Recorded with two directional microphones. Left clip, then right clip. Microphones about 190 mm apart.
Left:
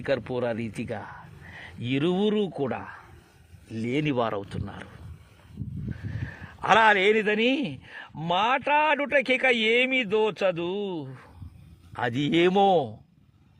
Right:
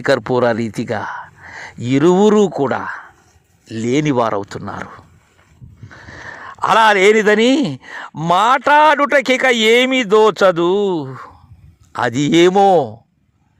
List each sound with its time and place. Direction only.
0.0 s speech: 35° right (ahead or behind)
6.1 s speech: 35° right (ahead or behind)
11.9 s speech: 25° right (ahead or behind)